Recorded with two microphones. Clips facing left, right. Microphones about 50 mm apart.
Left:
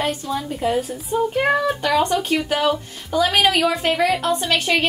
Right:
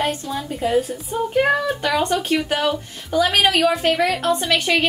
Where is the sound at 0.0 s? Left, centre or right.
Centre.